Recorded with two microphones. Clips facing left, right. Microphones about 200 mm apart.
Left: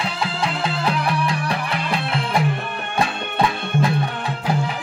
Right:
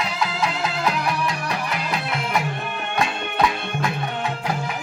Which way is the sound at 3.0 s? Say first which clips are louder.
Left 1 dB; 35° left (ahead or behind).